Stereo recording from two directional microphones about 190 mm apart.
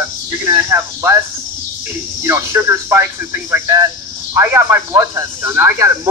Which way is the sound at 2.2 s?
15° right (ahead or behind).